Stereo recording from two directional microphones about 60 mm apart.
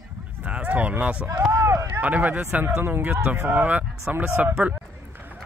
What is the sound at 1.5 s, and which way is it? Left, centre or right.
Speech, right.